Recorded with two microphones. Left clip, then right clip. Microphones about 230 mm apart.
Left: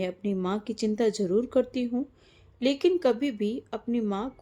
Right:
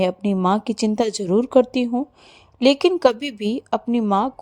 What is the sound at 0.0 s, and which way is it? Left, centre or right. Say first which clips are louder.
A woman's voice: right 10 dB; right.